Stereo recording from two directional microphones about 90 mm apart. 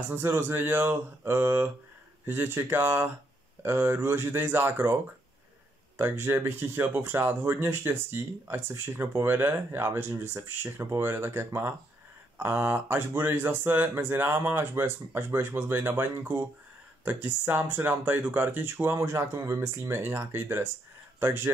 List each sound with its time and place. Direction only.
0.1 s speech: 25° right (ahead or behind)
5.9 s speech: 25° right (ahead or behind)